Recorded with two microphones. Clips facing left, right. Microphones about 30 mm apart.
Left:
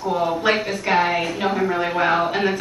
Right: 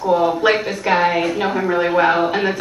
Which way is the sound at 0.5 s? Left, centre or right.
Centre.